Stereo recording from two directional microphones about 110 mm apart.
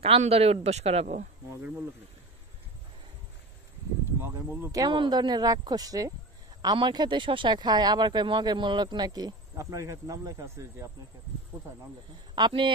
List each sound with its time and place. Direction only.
0.0 s speech: 65° right (ahead or behind)
4.8 s speech: 45° right (ahead or behind); by 10.9 s 25° right (ahead or behind)
12.4 s speech: 45° right (ahead or behind)